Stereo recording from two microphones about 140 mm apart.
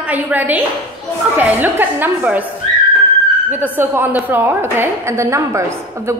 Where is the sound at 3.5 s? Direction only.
15° right (ahead or behind).